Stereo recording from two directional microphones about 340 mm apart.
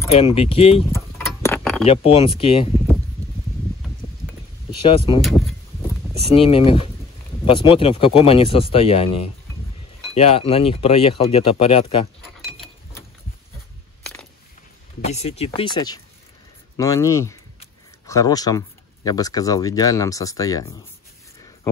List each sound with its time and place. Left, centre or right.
0.1 s speech: centre
1.1 s tick-tock: centre
1.9 s speech: centre
4.6 s speech: centre
6.3 s speech: centre
15.0 s speech: centre